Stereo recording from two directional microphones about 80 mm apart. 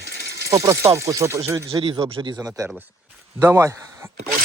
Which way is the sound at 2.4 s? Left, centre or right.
Right.